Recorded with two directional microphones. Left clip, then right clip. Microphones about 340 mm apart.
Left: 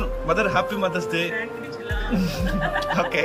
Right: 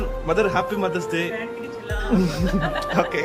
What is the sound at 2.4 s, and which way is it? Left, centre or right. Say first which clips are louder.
Speech: even; centre.